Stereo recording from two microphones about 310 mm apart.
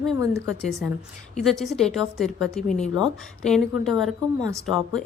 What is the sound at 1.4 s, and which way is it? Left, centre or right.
A woman's voice, centre.